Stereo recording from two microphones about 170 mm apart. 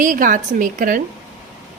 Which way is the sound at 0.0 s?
55° right (ahead or behind).